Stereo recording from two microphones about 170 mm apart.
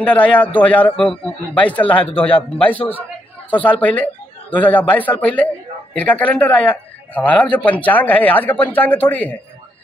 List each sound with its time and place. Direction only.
0.0 s a man's voice: 10° left (ahead or behind)
2.0 s speech: 30° left (ahead or behind)
2.3 s a man's voice: 10° left (ahead or behind)